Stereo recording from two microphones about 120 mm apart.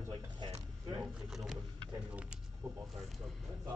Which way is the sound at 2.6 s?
20° right (ahead or behind).